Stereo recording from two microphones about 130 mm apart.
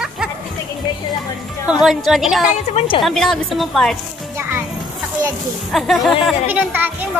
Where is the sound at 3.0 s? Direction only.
5° left (ahead or behind).